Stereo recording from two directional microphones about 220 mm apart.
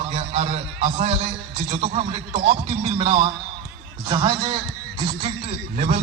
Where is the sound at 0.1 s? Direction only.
25° right (ahead or behind).